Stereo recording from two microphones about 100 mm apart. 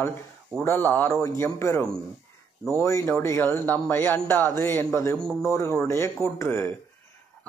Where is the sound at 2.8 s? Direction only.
30° left (ahead or behind).